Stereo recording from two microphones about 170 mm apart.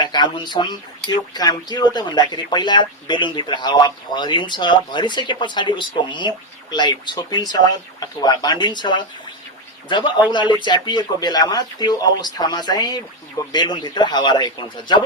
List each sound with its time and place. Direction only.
0.0 s speech: 25° left (ahead or behind)